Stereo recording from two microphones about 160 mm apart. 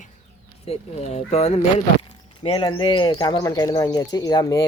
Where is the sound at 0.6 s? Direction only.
40° left (ahead or behind).